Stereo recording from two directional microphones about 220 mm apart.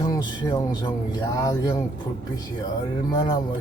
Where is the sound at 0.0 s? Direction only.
15° left (ahead or behind).